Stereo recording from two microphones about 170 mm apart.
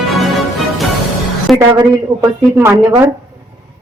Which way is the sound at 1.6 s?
20° right (ahead or behind).